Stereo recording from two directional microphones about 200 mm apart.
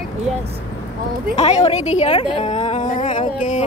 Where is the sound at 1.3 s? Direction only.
30° left (ahead or behind).